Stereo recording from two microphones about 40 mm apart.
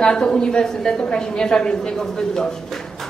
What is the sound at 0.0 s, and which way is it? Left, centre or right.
A woman's voice, left.